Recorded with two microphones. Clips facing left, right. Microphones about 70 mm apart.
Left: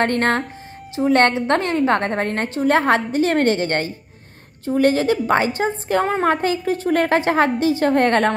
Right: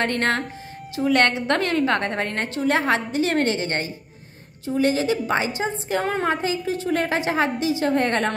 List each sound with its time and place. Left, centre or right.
0.0 s a woman's voice: left